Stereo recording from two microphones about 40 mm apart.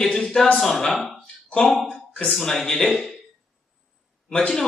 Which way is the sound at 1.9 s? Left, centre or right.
Left.